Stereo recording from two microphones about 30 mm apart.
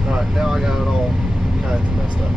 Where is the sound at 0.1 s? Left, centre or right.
Centre.